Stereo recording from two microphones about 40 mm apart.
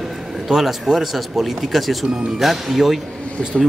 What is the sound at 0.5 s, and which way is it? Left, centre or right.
Speech, centre.